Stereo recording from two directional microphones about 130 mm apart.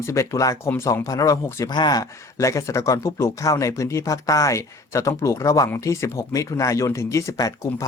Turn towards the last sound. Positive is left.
turn(degrees=25)  # may be behind; listen again after turning